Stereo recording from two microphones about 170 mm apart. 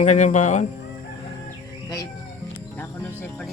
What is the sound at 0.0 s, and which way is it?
Speech, 45° left (ahead or behind).